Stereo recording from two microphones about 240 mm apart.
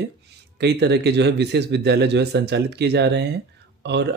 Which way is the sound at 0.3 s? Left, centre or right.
Right.